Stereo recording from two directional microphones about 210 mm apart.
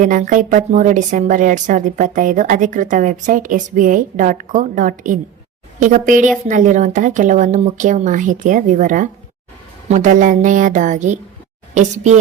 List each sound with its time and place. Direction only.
0.0 s a woman's voice: 40° right (ahead or behind)